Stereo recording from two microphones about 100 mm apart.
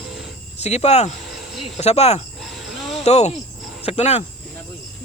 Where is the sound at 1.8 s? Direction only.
90° left.